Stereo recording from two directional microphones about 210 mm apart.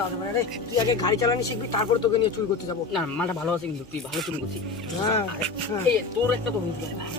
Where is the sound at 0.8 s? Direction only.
20° left (ahead or behind).